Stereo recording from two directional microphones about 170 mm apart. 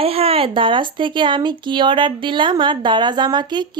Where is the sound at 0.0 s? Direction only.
35° right (ahead or behind).